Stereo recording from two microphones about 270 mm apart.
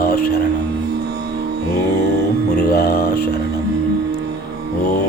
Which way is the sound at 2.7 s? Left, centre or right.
Left.